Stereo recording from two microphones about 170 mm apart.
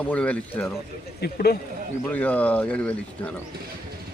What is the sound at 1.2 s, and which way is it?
Speech, 65° left (ahead or behind).